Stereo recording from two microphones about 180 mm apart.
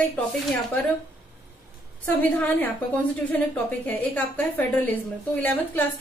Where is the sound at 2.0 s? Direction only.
10° left (ahead or behind).